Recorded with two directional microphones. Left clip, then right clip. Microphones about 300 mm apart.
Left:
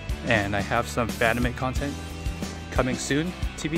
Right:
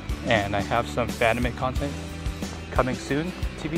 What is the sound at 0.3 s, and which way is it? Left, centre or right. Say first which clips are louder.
Speech: right 1 dB; left.